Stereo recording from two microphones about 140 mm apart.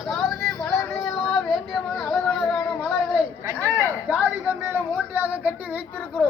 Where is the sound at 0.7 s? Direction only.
20° left (ahead or behind).